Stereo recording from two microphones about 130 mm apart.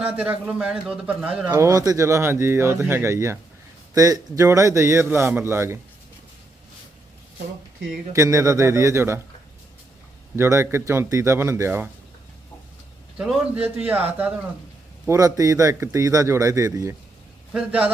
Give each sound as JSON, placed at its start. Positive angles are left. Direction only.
{"t": 0.0, "sound": "speech", "side_deg": -10}
{"t": 1.5, "sound": "a man's voice", "side_deg": -25}
{"t": 8.1, "sound": "a man's voice", "side_deg": -25}
{"t": 10.3, "sound": "a man's voice", "side_deg": -20}
{"t": 13.7, "sound": "speech", "side_deg": -10}
{"t": 15.0, "sound": "a man's voice", "side_deg": -25}
{"t": 17.5, "sound": "speech", "side_deg": -10}